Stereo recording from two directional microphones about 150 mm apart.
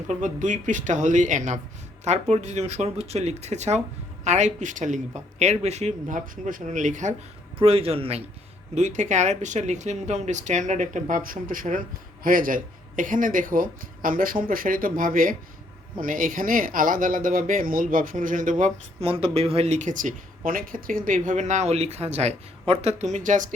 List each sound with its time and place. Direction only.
0.1 s speech: 55° right (ahead or behind)
7.6 s speech: 40° right (ahead or behind)
8.7 s speech: 50° right (ahead or behind)
18.6 s speech: 40° right (ahead or behind)